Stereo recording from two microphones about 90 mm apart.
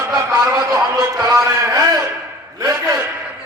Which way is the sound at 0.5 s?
40° right (ahead or behind).